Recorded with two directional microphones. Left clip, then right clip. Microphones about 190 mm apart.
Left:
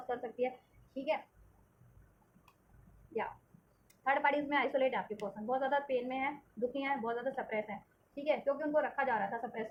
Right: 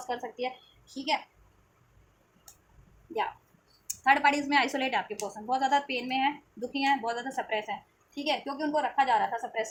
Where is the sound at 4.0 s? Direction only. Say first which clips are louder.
Right 8 dB; 35° right (ahead or behind).